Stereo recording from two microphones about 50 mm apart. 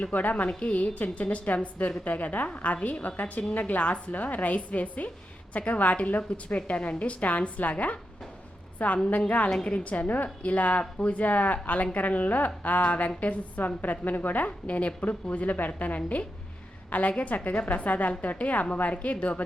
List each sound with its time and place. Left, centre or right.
0.0 s a woman's voice: left